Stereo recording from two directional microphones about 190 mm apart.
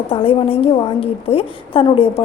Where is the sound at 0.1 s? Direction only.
30° left (ahead or behind).